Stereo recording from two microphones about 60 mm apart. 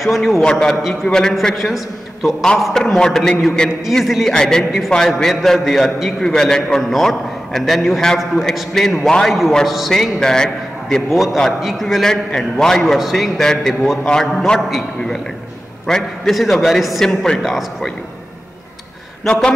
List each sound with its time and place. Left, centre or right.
0.0 s a man's voice: centre
3.8 s a man's voice: centre
17.4 s a man's voice: centre